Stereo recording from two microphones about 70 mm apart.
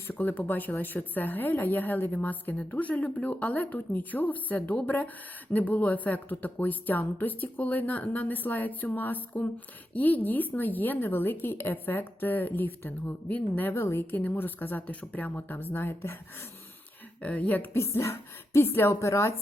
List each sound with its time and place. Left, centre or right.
0.1 s speech: left
17.2 s speech: left
17.7 s a woman's voice: left